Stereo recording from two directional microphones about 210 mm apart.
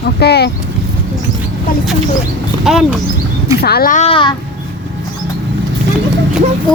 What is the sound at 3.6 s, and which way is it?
Speech, 45° left (ahead or behind).